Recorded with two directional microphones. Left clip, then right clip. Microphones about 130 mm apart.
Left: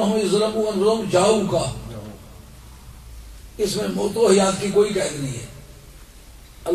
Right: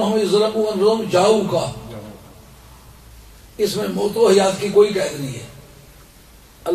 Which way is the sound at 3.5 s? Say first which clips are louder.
Right 3 dB; 10° right (ahead or behind).